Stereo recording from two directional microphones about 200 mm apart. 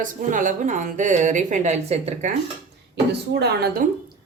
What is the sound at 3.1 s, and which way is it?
Speech, 55° right (ahead or behind).